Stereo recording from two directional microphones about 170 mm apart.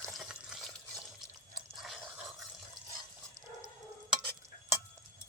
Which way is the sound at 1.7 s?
Centre (ahead or behind).